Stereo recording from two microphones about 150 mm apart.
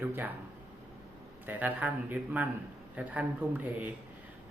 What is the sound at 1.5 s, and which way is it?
Speech, 10° right (ahead or behind).